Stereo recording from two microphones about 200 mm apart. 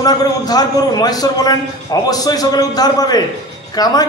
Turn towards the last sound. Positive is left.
turn(degrees=20)  # may be behind; listen again after turning